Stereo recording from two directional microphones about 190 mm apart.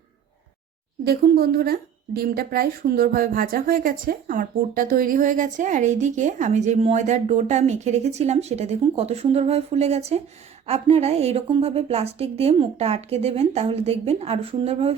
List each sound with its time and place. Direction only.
1.0 s speech: 55° right (ahead or behind); by 14.9 s 30° right (ahead or behind)